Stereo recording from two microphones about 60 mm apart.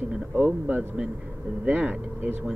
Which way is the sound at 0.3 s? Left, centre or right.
Right.